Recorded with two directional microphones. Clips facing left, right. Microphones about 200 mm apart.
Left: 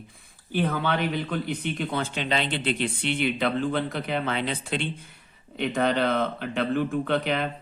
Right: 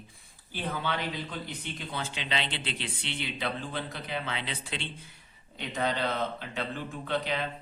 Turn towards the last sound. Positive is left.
turn(degrees=60)  # may be behind; listen again after turning